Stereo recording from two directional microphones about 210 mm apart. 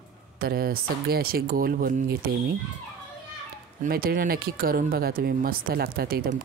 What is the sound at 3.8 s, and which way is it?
Speech, 45° right (ahead or behind).